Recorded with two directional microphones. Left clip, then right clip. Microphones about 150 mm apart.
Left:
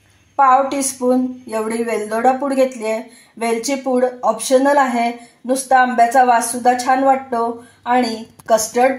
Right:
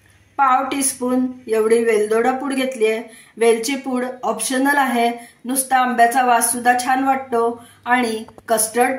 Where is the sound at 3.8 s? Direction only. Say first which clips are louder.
Left 6 dB; 20° left (ahead or behind).